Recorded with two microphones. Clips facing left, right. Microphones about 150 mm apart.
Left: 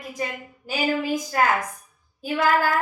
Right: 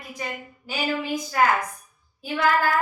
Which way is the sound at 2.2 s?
40° left (ahead or behind).